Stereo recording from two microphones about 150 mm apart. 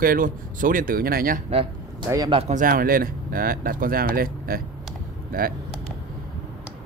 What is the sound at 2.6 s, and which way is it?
Speech, 70° right (ahead or behind).